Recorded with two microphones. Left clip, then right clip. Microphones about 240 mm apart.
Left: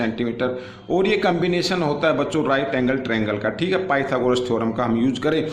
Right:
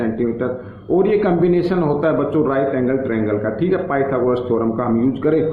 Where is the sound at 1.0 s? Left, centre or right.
Left.